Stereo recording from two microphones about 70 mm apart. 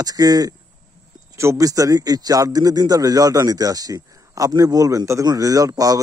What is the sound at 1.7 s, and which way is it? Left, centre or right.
Speech, right.